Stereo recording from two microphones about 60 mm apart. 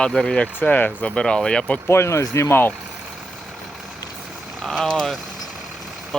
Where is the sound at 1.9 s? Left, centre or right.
Left.